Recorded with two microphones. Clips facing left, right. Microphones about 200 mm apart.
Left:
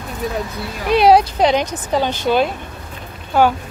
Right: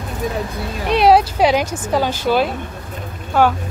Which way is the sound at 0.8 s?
Centre (ahead or behind).